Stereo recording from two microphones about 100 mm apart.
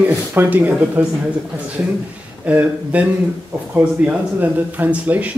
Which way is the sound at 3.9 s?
15° right (ahead or behind).